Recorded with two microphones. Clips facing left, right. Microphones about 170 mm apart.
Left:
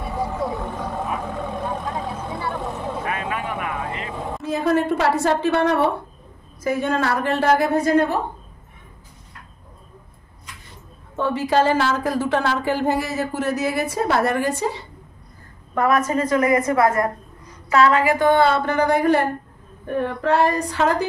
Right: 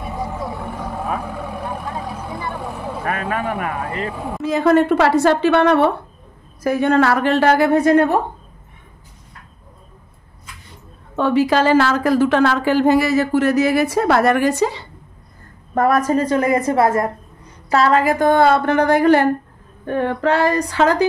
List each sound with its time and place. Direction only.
0.0 s vehicle: 15° right (ahead or behind)
0.6 s a sound: 10° right (ahead or behind)
1.6 s vehicle: 5° right (ahead or behind)
3.1 s vehicle: 45° right (ahead or behind)
4.4 s a woman's voice: 80° right; by 8.2 s 60° right (ahead or behind)
11.1 s a woman's voice: 90° right
15.7 s a woman's voice: 40° right (ahead or behind); by 19.2 s 75° right (ahead or behind)
19.9 s female singing: 90° right